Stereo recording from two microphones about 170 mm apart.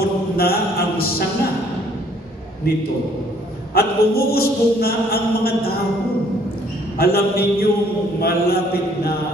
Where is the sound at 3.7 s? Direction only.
65° left (ahead or behind).